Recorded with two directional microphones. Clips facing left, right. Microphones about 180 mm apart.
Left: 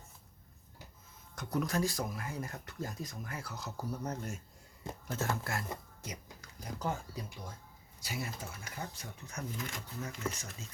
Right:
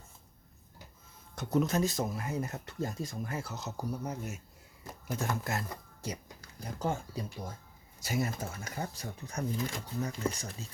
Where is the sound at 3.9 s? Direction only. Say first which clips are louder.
Even; 10° right (ahead or behind).